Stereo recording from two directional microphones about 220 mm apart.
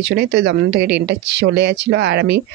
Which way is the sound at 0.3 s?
50° right (ahead or behind).